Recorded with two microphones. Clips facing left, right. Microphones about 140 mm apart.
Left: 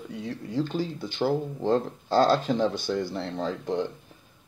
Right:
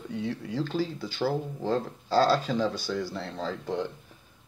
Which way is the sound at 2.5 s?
25° left (ahead or behind).